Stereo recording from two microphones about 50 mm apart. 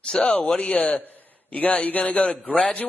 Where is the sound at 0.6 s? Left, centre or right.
Left.